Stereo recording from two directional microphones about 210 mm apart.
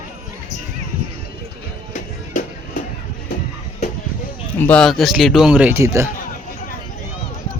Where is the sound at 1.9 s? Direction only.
40° left (ahead or behind).